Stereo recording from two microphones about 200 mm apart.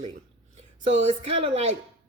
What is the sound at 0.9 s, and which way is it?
Speech, 30° right (ahead or behind).